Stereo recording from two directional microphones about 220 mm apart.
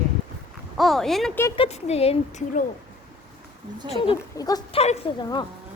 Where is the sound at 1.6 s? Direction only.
30° left (ahead or behind).